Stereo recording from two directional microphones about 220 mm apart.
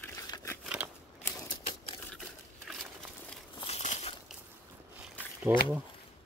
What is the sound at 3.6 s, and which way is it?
Crumpling, 30° left (ahead or behind).